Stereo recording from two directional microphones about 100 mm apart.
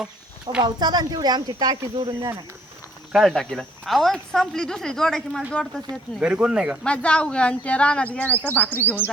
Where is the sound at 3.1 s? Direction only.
Centre (ahead or behind).